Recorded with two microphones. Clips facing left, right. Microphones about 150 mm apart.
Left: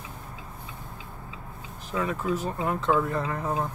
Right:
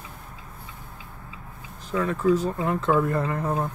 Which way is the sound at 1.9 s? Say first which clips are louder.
Right 6 dB; 10° left (ahead or behind).